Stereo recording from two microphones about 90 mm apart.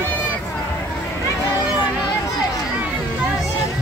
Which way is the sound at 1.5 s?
50° left (ahead or behind).